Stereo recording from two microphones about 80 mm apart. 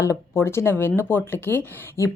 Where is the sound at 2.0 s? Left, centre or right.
Left.